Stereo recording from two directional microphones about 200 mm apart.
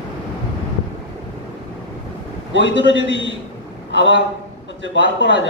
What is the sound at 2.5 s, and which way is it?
A woman's voice, 65° left (ahead or behind).